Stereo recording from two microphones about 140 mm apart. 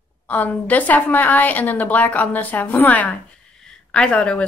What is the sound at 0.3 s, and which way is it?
A woman's voice, 10° left (ahead or behind).